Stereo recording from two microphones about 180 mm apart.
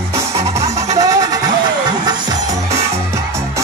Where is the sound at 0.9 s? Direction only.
20° right (ahead or behind).